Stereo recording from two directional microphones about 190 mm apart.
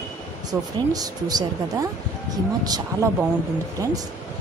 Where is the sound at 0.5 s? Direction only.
20° right (ahead or behind).